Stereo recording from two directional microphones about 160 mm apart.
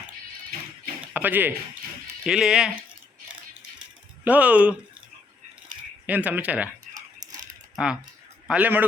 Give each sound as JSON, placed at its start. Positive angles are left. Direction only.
{"t": 1.0, "sound": "speech", "side_deg": -10}
{"t": 4.2, "sound": "speech", "side_deg": -10}
{"t": 6.1, "sound": "speech", "side_deg": -10}
{"t": 7.8, "sound": "speech", "side_deg": -5}